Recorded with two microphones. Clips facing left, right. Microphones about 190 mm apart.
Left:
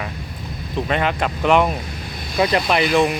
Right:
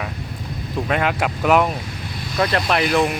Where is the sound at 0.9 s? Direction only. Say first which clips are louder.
Even; 5° right (ahead or behind).